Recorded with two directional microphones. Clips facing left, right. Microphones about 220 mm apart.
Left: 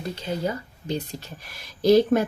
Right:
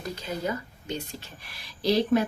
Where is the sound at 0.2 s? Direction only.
30° left (ahead or behind).